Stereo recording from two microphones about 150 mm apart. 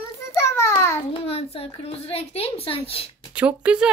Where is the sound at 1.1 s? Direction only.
40° left (ahead or behind).